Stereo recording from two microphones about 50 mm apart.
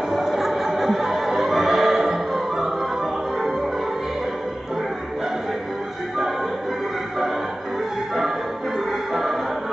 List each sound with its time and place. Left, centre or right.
0.1 s music: centre
9.1 s music: centre